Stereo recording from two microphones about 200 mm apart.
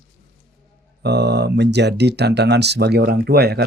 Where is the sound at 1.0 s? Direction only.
55° right (ahead or behind).